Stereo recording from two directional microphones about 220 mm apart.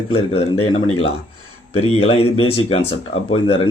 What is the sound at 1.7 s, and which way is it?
Speech, 25° left (ahead or behind).